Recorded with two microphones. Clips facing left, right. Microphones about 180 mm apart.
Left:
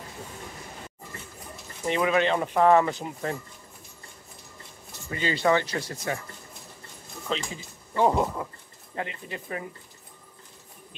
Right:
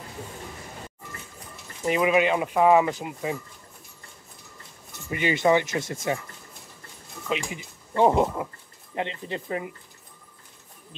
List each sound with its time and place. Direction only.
1.9 s speech: 10° right (ahead or behind)
5.1 s speech: 20° right (ahead or behind)
7.2 s speech: 10° right (ahead or behind); by 9.7 s 25° right (ahead or behind)